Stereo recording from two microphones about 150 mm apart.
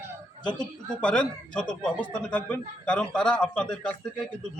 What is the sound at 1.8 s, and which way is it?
A man's voice, 10° left (ahead or behind).